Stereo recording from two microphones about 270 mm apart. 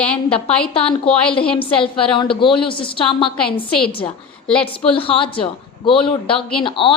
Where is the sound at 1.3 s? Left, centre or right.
Centre.